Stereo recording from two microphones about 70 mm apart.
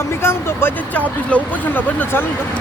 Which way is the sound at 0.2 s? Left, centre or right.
Left.